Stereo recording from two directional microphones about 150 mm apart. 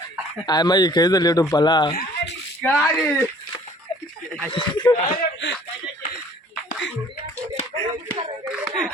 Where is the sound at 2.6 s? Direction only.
10° left (ahead or behind).